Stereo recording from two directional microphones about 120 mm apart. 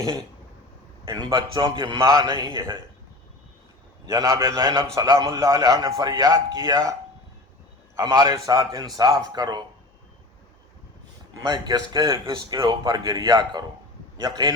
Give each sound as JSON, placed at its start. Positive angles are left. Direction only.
{"t": 1.0, "sound": "speech", "side_deg": -30}
{"t": 4.0, "sound": "a man's voice", "side_deg": -30}
{"t": 7.9, "sound": "speech", "side_deg": -35}
{"t": 11.4, "sound": "speech", "side_deg": -35}